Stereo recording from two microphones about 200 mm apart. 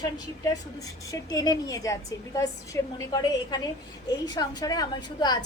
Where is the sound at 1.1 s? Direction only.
20° left (ahead or behind).